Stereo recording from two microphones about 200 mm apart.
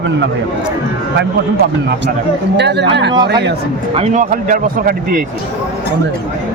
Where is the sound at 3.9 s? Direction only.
35° right (ahead or behind).